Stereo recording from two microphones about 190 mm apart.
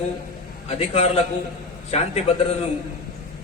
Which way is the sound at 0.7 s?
35° left (ahead or behind).